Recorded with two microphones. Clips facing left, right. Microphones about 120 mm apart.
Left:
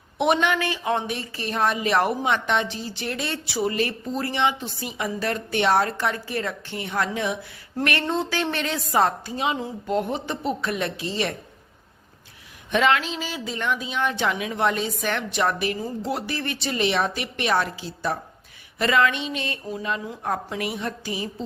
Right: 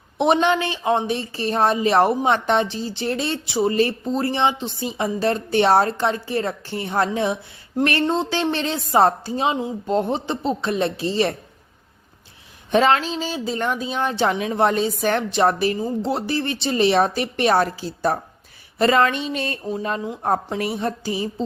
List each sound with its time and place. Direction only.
0.2 s speech: 30° right (ahead or behind)
12.7 s speech: 35° right (ahead or behind)